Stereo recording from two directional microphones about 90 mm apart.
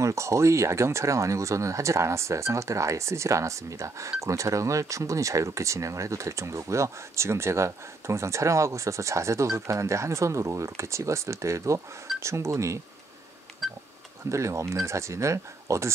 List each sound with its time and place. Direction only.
0.0 s speech: 35° right (ahead or behind)
13.6 s speech: centre (ahead or behind)
14.3 s speech: 35° right (ahead or behind)